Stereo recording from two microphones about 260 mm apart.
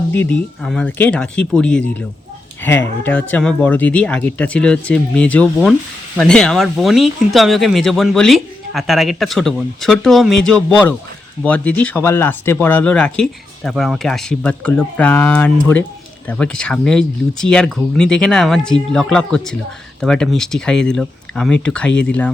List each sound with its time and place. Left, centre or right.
0.1 s speech: centre